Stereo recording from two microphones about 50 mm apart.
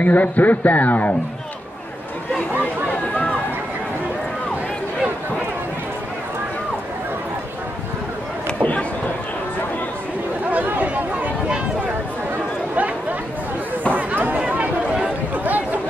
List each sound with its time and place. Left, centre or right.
0.0 s a man's voice: left
2.6 s chatter: left
10.5 s chatter: right
13.9 s chatter: right